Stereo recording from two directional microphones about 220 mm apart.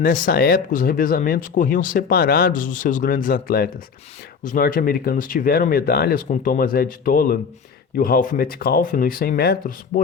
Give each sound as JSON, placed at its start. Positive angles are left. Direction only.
{"t": 0.0, "sound": "speech", "side_deg": 40}